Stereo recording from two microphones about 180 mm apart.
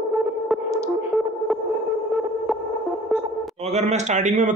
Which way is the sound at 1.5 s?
Centre (ahead or behind).